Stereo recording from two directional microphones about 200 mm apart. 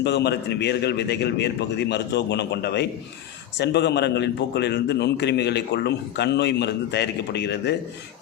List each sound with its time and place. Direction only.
0.0 s a man's voice: 60° left (ahead or behind)